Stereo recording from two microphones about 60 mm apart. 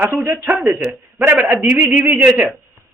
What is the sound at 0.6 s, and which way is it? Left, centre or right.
A man's voice, right.